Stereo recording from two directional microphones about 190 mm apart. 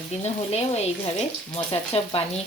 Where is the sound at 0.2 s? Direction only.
35° left (ahead or behind).